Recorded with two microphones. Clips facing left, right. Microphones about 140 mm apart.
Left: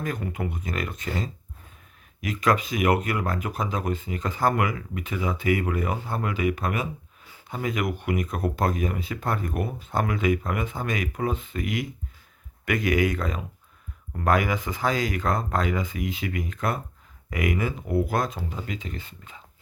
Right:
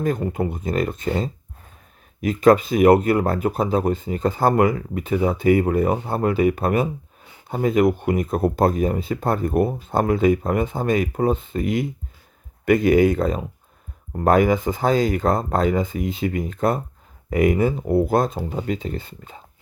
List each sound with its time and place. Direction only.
0.0 s speech: 30° right (ahead or behind)